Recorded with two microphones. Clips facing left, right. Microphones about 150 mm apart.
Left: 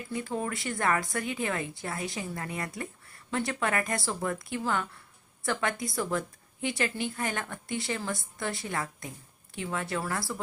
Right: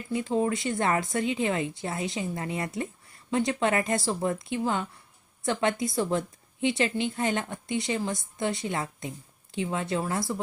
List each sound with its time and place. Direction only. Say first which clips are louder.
0.1 s a woman's voice: right 7 dB; 20° right (ahead or behind)